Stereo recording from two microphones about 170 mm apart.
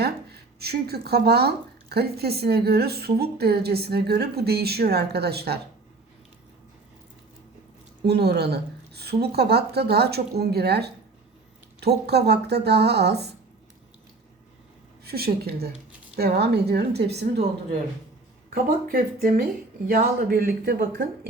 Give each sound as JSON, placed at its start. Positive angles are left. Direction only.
{"t": 0.0, "sound": "speech", "side_deg": -70}
{"t": 8.0, "sound": "a woman's voice", "side_deg": -75}
{"t": 15.0, "sound": "speech", "side_deg": -65}
{"t": 18.5, "sound": "speech", "side_deg": -60}